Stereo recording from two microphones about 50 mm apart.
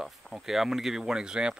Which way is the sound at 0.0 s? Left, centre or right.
Centre.